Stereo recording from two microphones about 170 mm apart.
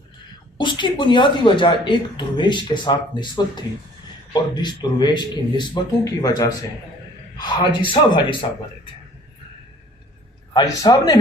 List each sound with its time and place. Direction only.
0.6 s speech: 30° left (ahead or behind)
10.5 s speech: 25° left (ahead or behind)